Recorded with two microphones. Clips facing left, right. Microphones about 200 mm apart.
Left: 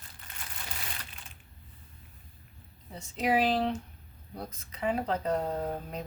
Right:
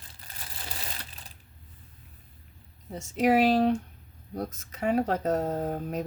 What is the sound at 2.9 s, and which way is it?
Speech, 45° right (ahead or behind).